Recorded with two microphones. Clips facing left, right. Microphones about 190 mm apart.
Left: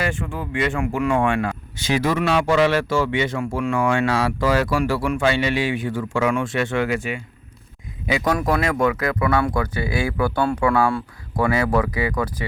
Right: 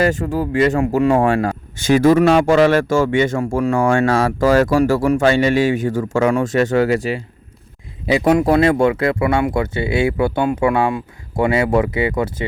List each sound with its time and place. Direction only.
0.0 s speech: 40° right (ahead or behind); by 12.5 s 25° right (ahead or behind)